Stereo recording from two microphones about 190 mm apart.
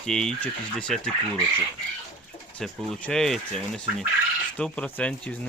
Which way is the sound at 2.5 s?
5° left (ahead or behind).